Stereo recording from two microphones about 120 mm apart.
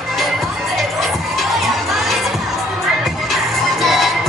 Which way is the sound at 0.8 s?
Centre (ahead or behind).